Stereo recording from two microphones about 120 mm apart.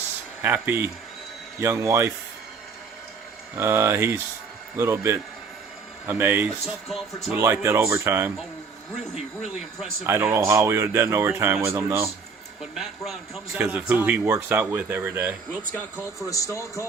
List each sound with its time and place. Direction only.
0.4 s speech: 20° right (ahead or behind)
3.5 s speech: 20° right (ahead or behind)
6.8 s speech: centre (ahead or behind)
7.3 s speech: 20° right (ahead or behind)
10.1 s speech: 20° right (ahead or behind)
13.5 s speech: 15° right (ahead or behind)
15.7 s speech: 20° left (ahead or behind)